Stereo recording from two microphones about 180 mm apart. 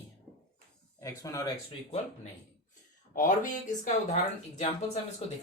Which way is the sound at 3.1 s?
45° left (ahead or behind).